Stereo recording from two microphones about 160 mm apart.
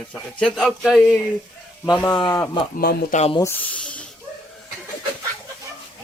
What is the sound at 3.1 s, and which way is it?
Speech, 45° left (ahead or behind).